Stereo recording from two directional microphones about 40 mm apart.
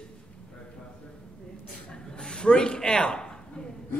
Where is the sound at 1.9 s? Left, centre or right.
Left.